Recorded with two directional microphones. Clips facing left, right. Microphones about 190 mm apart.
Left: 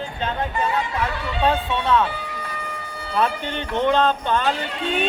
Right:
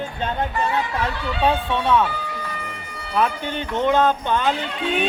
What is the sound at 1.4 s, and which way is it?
Speech, 15° right (ahead or behind).